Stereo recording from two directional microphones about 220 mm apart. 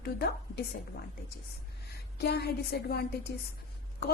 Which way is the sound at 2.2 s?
50° left (ahead or behind).